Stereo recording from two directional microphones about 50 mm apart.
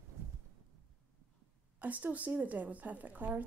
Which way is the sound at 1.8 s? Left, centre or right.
Right.